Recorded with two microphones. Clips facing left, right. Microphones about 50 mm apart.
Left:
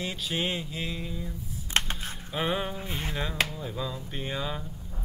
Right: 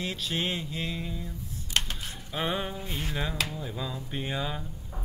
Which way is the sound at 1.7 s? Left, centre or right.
Left.